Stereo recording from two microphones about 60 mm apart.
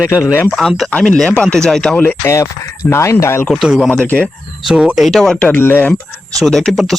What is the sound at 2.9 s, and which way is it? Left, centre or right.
Speech, left.